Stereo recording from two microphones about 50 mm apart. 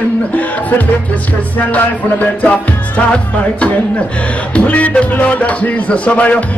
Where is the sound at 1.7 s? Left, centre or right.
Left.